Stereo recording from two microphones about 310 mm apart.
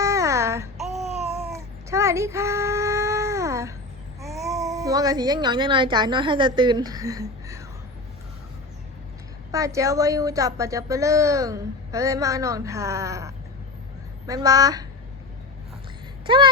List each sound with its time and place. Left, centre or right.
0.0 s a sound: centre
1.0 s babbling: centre
1.5 s cat: centre
4.2 s a child's voice: centre
9.5 s a woman's voice: centre
16.2 s speech: centre